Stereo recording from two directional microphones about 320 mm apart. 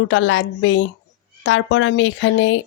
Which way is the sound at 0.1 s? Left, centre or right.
Left.